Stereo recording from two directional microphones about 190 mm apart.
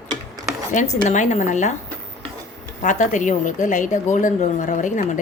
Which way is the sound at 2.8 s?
40° left (ahead or behind).